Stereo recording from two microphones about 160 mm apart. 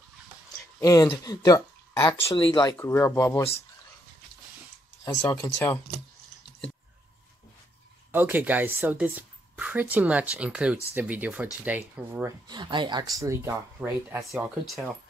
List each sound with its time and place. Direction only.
0.7 s speech: 20° left (ahead or behind)
2.8 s speech: 15° left (ahead or behind)
5.4 s speech: 10° left (ahead or behind)
8.1 s speech: 10° right (ahead or behind)
12.4 s speech: 30° right (ahead or behind)
13.2 s speech: 15° right (ahead or behind)
14.3 s speech: centre (ahead or behind)